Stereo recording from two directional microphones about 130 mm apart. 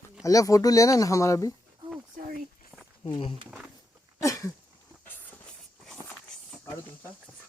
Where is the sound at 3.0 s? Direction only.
40° left (ahead or behind).